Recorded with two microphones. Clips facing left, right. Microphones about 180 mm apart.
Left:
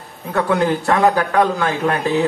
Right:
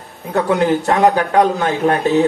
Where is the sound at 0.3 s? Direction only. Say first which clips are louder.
Right 2 dB; 25° right (ahead or behind).